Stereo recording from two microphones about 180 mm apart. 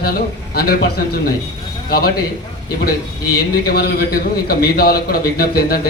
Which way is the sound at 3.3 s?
60° left (ahead or behind).